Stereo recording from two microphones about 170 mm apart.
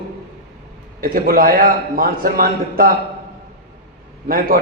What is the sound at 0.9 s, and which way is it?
A man's voice, 60° right (ahead or behind).